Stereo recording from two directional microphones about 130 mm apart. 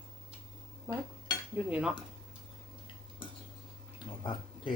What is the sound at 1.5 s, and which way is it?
Speech, 10° right (ahead or behind).